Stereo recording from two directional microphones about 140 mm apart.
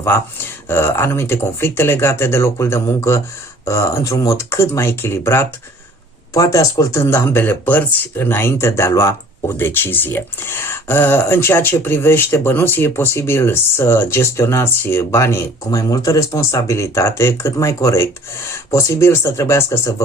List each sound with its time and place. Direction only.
0.7 s speech: 15° left (ahead or behind)